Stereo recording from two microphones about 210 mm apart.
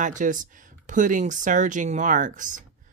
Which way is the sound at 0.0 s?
35° right (ahead or behind).